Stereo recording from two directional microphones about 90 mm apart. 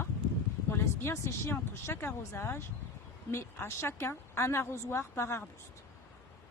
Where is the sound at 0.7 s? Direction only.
30° left (ahead or behind).